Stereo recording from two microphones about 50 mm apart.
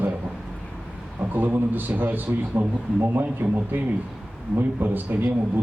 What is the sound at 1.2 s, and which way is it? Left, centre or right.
A man's voice, right.